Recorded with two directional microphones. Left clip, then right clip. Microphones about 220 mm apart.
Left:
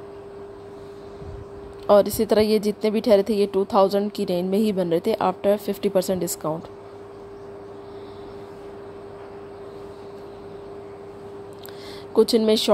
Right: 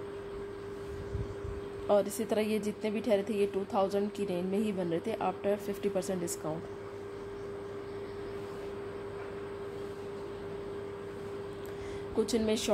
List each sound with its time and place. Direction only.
1.9 s a woman's voice: 35° left (ahead or behind)
12.2 s a woman's voice: 35° left (ahead or behind)